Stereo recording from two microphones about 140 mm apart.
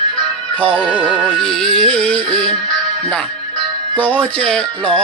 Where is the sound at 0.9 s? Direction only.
10° right (ahead or behind).